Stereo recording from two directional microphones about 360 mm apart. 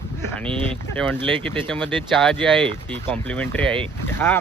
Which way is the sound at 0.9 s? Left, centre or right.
Centre.